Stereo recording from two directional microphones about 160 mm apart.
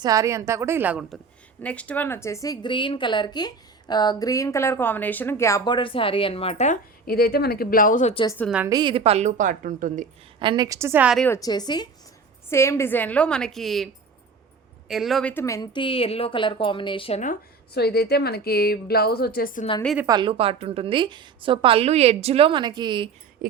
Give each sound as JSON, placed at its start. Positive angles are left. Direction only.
{"t": 0.0, "sound": "a woman's voice", "side_deg": -20}
{"t": 1.6, "sound": "speech", "side_deg": 10}
{"t": 7.1, "sound": "a woman's voice", "side_deg": 70}
{"t": 8.6, "sound": "a woman's voice", "side_deg": -25}
{"t": 10.4, "sound": "a woman's voice", "side_deg": -25}
{"t": 11.3, "sound": "a woman's voice", "side_deg": 25}
{"t": 17.7, "sound": "a woman's voice", "side_deg": 80}
{"t": 20.1, "sound": "a woman's voice", "side_deg": -30}